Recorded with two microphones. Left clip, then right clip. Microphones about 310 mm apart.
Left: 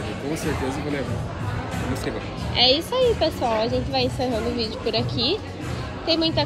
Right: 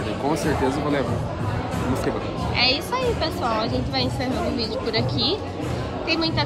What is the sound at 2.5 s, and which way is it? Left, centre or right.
Speech, centre.